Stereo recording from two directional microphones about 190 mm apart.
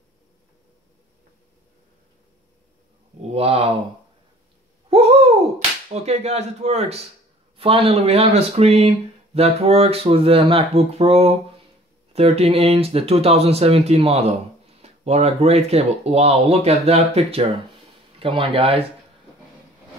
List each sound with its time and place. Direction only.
3.2 s speech: 30° right (ahead or behind)
4.8 s a sound: 30° right (ahead or behind)
6.0 s speech: 35° right (ahead or behind)